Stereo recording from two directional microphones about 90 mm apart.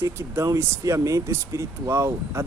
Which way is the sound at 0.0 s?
30° right (ahead or behind).